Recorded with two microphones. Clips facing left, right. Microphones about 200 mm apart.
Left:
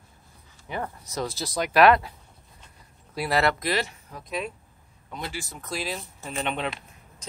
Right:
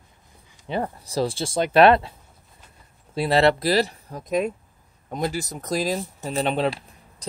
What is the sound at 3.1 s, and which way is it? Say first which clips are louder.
Speech: right 6 dB; 25° right (ahead or behind).